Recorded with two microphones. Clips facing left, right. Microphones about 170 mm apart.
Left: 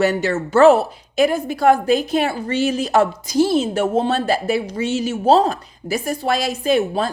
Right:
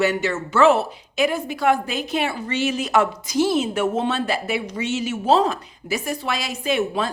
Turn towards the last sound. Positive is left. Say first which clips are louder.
# left 4 dB
turn(degrees=40)  # may be behind; listen again after turning